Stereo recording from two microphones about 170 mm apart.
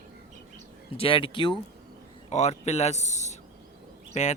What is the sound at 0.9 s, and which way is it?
Speech, 30° left (ahead or behind).